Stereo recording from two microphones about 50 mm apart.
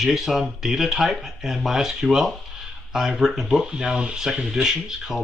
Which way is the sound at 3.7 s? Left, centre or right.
Centre.